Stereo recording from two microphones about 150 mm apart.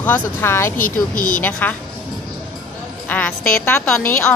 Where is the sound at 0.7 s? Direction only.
65° left (ahead or behind).